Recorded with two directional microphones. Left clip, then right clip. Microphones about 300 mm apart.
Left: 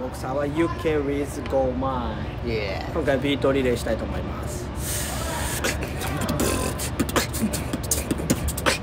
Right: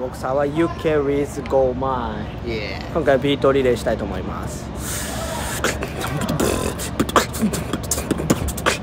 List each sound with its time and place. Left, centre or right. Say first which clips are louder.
0.4 s speech: right 3 dB; centre
3.1 s speech: right 6 dB; centre
5.6 s beatboxing: right 4 dB; centre